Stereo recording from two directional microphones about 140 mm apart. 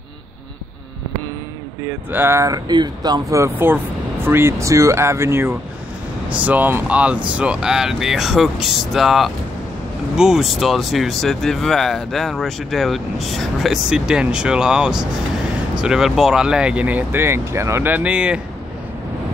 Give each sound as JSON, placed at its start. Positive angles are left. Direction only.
{"t": 1.9, "sound": "speech", "side_deg": -15}